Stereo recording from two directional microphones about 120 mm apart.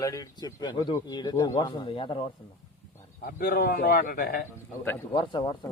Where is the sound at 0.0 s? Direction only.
30° left (ahead or behind); by 2.2 s 50° left (ahead or behind).